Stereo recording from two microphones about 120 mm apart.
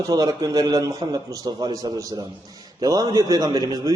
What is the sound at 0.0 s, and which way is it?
Speech, 30° right (ahead or behind).